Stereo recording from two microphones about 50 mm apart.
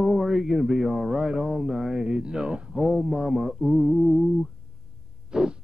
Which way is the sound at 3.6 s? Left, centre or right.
Centre.